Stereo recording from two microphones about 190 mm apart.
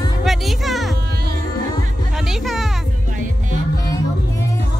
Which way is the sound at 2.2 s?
Centre (ahead or behind).